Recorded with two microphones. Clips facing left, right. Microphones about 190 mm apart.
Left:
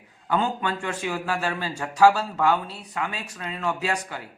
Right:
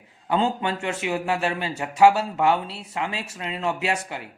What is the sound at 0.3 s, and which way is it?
Speech, 25° right (ahead or behind).